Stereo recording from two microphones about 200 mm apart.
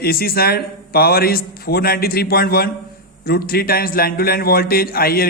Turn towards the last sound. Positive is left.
turn(degrees=50)  # may be behind; listen again after turning